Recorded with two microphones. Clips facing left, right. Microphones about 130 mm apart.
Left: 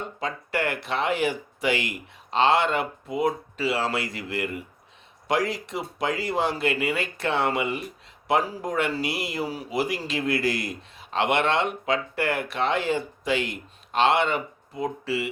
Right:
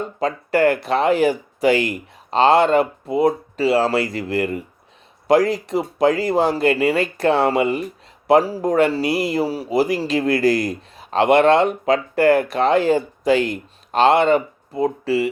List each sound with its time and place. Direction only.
0.0 s speech: 40° right (ahead or behind)